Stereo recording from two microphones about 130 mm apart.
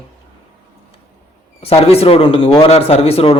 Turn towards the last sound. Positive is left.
turn(degrees=50)  # may be behind; listen again after turning